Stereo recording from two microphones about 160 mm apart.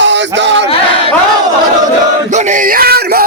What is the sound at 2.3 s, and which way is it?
Music, 50° right (ahead or behind).